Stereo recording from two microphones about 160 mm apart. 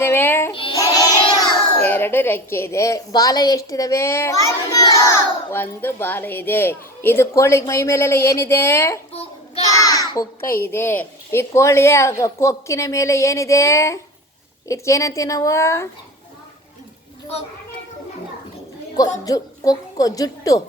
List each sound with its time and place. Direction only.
0.0 s child singing: 15° left (ahead or behind)
1.7 s a woman's voice: 10° left (ahead or behind)
19.2 s a child's voice: 20° left (ahead or behind)